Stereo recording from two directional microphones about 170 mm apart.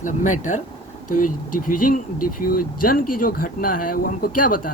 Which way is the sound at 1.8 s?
55° left (ahead or behind).